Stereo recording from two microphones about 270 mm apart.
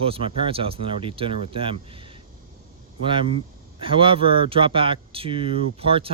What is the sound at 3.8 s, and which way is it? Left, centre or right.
Speech, centre.